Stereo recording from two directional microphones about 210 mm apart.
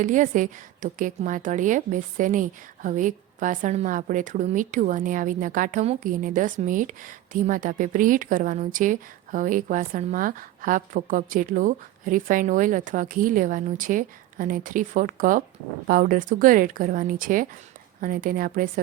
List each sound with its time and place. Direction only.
0.0 s a woman's voice: 35° right (ahead or behind)